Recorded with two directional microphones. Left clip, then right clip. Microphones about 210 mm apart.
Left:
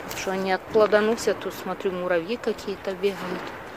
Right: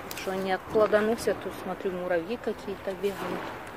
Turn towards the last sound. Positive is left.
turn(degrees=30)  # may be behind; listen again after turning